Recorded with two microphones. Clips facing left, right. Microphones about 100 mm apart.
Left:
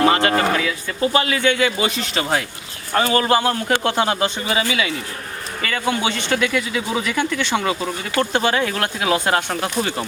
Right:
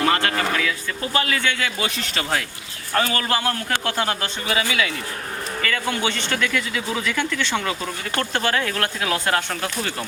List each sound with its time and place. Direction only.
0.0 s a sound: 15° left (ahead or behind)
1.1 s a man's voice: 15° left (ahead or behind)
5.6 s a man's voice: 15° left (ahead or behind)